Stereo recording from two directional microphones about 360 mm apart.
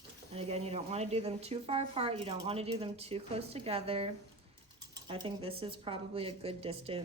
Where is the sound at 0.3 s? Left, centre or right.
Centre.